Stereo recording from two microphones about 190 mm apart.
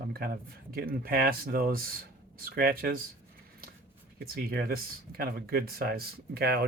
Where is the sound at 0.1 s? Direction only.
50° right (ahead or behind).